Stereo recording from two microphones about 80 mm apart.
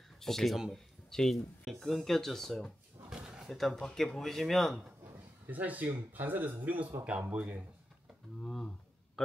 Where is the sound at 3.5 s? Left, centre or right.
Centre.